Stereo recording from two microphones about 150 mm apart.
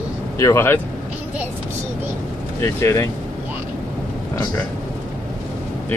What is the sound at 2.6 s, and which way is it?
Speech, 15° left (ahead or behind).